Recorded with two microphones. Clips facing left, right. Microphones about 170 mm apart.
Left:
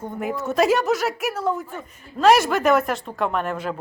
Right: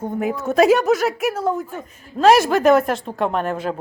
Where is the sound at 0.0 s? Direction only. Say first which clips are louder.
Right 4 dB; 10° right (ahead or behind).